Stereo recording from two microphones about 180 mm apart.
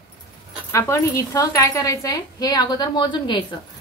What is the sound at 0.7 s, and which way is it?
Speech, 15° left (ahead or behind).